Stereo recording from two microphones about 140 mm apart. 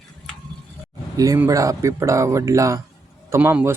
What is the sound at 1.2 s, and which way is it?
A man's voice, 25° right (ahead or behind).